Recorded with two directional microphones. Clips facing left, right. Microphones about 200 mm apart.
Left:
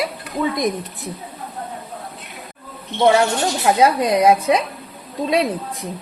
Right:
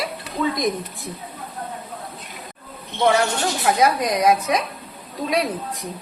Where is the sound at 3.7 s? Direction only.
30° left (ahead or behind).